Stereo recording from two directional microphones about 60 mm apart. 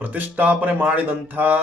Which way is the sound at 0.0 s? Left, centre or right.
Right.